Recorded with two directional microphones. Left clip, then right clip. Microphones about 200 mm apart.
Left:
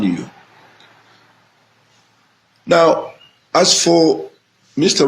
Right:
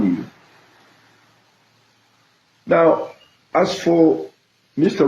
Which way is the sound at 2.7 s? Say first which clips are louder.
Left 3 dB; 45° left (ahead or behind).